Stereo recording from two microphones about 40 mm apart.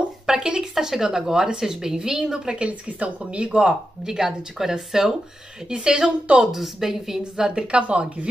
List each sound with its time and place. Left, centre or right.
0.3 s a woman's voice: centre
2.6 s speech: right
4.0 s a woman's voice: centre
7.6 s speech: right